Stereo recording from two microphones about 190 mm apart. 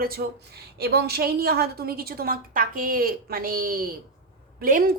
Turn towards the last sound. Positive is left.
turn(degrees=-50)  # may be behind; listen again after turning